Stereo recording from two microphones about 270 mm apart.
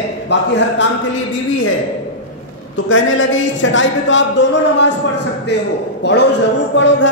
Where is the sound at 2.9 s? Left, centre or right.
Left.